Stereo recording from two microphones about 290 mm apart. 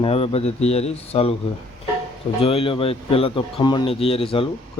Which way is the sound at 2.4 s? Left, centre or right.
Centre.